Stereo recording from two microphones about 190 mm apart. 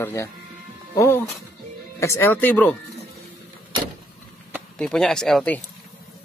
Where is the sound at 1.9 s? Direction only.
15° left (ahead or behind).